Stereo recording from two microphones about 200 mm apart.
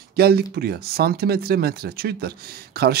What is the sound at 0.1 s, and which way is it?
Speech, 50° right (ahead or behind).